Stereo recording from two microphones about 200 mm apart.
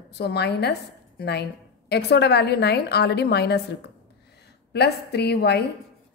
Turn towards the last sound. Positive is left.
turn(degrees=55)  # may be behind; listen again after turning